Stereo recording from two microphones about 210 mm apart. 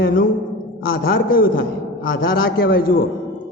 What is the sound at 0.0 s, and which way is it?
A man's voice, 40° left (ahead or behind).